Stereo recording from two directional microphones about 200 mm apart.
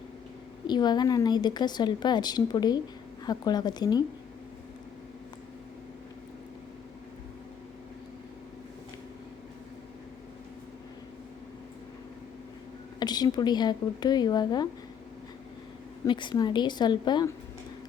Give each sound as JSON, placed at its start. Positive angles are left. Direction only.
{"t": 0.7, "sound": "a woman's voice", "side_deg": 20}
{"t": 13.0, "sound": "a woman's voice", "side_deg": 20}
{"t": 16.0, "sound": "a woman's voice", "side_deg": 20}